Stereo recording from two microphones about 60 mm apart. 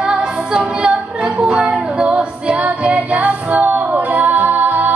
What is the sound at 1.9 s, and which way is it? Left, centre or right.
Music, centre.